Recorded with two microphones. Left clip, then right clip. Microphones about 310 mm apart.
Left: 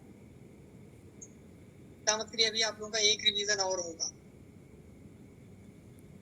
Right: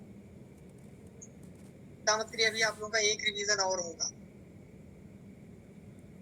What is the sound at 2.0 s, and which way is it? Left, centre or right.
A woman's voice, left.